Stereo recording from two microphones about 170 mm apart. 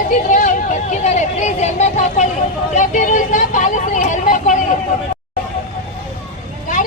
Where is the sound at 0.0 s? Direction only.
50° left (ahead or behind).